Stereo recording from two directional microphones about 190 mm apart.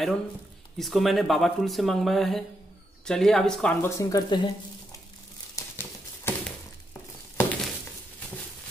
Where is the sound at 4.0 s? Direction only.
20° left (ahead or behind).